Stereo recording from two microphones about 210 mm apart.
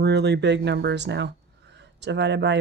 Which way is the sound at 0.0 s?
55° right (ahead or behind).